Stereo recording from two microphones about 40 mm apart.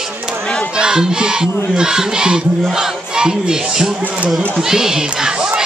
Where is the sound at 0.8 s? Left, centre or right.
Centre.